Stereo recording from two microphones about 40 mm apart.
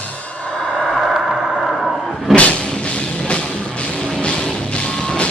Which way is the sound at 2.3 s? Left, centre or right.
Left.